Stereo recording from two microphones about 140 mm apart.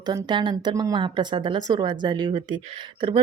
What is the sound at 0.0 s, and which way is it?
A woman's voice, 30° right (ahead or behind).